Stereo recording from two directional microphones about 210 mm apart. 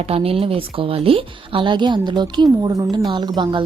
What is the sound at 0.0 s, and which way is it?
Speech, 30° right (ahead or behind).